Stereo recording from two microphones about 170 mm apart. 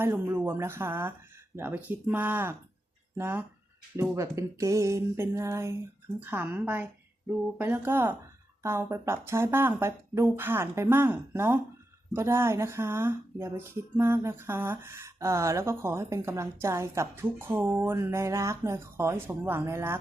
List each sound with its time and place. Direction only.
0.0 s speech: 15° right (ahead or behind)